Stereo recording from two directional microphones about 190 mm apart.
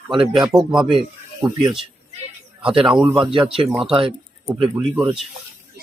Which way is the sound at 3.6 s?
Centre (ahead or behind).